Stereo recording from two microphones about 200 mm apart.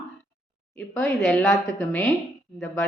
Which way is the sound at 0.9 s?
Centre (ahead or behind).